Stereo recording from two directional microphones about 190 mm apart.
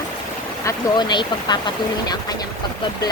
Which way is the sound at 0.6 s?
20° left (ahead or behind).